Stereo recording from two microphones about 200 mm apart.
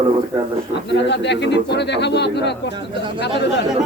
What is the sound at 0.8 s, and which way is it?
Speech, 60° left (ahead or behind).